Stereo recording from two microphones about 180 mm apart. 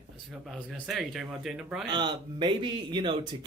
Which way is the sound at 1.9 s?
25° right (ahead or behind).